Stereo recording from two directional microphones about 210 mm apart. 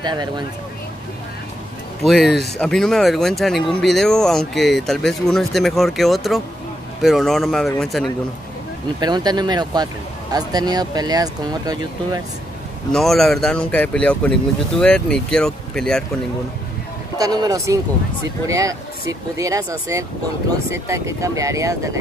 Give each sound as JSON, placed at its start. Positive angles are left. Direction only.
{"t": 0.0, "sound": "speech", "side_deg": -20}
{"t": 2.0, "sound": "speech", "side_deg": 0}
{"t": 9.0, "sound": "speech", "side_deg": -20}
{"t": 12.9, "sound": "speech", "side_deg": 0}
{"t": 17.2, "sound": "speech", "side_deg": -20}